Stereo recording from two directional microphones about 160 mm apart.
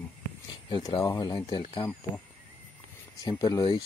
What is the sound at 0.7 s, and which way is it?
Speech, 25° left (ahead or behind).